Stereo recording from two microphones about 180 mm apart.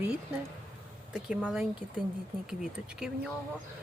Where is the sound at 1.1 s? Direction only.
5° right (ahead or behind).